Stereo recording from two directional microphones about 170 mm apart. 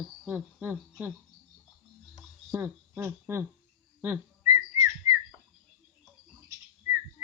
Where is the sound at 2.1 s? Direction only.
10° right (ahead or behind).